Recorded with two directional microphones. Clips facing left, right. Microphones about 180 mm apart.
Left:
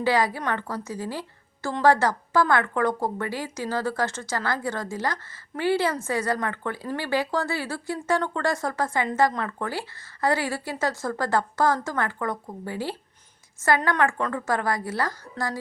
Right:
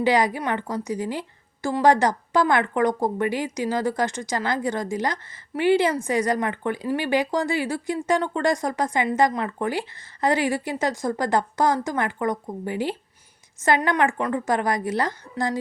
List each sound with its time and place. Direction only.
0.0 s a woman's voice: 15° right (ahead or behind)